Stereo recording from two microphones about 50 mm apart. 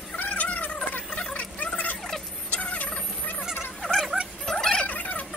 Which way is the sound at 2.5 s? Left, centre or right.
Left.